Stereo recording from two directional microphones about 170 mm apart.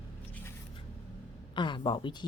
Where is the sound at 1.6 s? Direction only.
30° left (ahead or behind).